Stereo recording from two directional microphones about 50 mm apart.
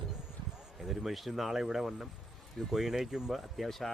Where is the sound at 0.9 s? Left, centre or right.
Centre.